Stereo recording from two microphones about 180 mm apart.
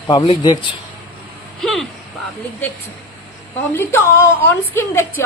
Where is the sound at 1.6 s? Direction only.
Centre (ahead or behind).